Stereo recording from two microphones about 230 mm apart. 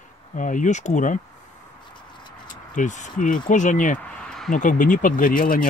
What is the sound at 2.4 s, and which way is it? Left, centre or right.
Speech, left.